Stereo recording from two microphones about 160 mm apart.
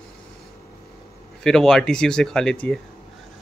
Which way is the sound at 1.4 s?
5° left (ahead or behind).